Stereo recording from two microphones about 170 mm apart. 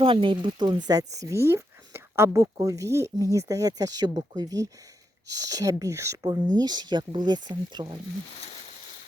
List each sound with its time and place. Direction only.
0.0 s speech: 30° right (ahead or behind)